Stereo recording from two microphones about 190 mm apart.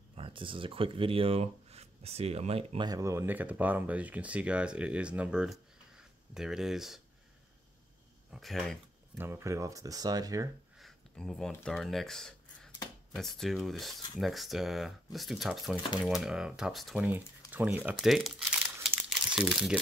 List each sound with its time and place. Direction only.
0.1 s speech: 30° right (ahead or behind)
2.9 s speech: 15° right (ahead or behind)
8.3 s speech: centre (ahead or behind)
9.2 s speech: 15° right (ahead or behind)
10.8 s speech: centre (ahead or behind)